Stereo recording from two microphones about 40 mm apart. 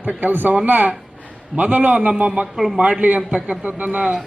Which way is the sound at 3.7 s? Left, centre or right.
Right.